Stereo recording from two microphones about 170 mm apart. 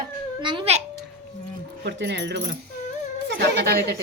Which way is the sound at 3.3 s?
75° right (ahead or behind).